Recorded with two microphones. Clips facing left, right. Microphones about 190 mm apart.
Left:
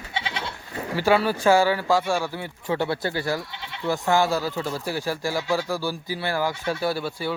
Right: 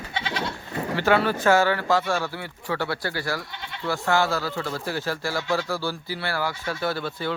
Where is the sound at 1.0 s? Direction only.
10° left (ahead or behind).